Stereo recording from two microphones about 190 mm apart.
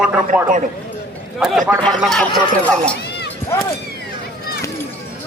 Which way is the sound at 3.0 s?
60° left (ahead or behind).